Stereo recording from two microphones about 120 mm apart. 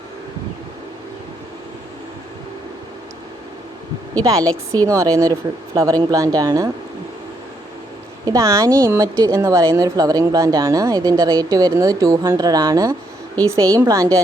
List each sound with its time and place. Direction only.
4.2 s speech: 25° right (ahead or behind)
4.4 s a woman's voice: 15° left (ahead or behind)
4.9 s speech: 25° right (ahead or behind)
8.2 s a woman's voice: 30° right (ahead or behind)